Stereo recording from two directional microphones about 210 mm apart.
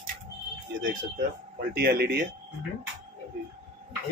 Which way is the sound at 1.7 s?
50° right (ahead or behind).